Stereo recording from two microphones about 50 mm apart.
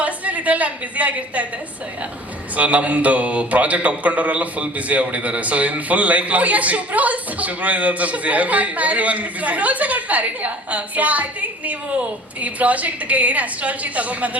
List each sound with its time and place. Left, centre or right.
0.0 s a woman's voice: right
2.6 s speech: right